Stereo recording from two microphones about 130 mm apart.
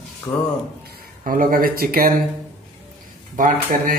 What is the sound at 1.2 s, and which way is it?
Speech, 90° right.